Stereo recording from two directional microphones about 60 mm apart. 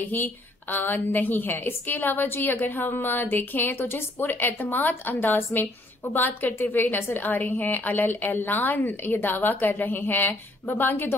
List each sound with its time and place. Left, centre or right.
0.0 s a woman's voice: left